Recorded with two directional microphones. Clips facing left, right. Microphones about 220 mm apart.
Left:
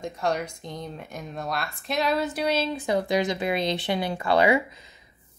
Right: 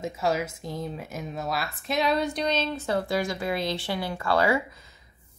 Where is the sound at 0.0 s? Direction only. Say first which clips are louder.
Right 1 dB; 5° right (ahead or behind).